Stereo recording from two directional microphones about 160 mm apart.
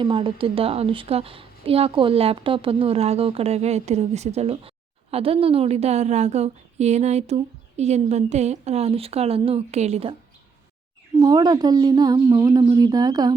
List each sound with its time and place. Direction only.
0.0 s a woman's voice: 35° right (ahead or behind)
11.2 s a woman's voice: 25° right (ahead or behind)